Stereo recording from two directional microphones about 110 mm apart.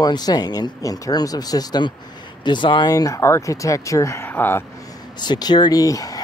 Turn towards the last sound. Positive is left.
turn(degrees=30)  # may be behind; listen again after turning